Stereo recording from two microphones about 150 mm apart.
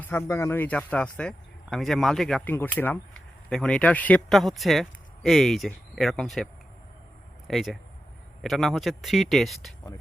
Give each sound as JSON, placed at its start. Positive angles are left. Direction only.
{"t": 0.0, "sound": "speech", "side_deg": 15}